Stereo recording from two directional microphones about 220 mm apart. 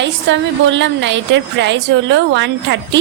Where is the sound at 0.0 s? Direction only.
55° right (ahead or behind).